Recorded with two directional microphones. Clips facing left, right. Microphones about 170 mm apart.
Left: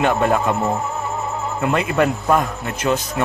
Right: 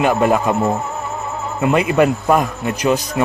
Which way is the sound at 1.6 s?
15° right (ahead or behind).